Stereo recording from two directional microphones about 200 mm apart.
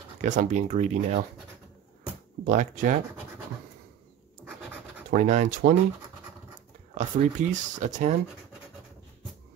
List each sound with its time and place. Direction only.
0.2 s speech: 40° right (ahead or behind)
2.4 s speech: 40° right (ahead or behind)
5.1 s speech: 40° right (ahead or behind)
7.0 s speech: 35° right (ahead or behind)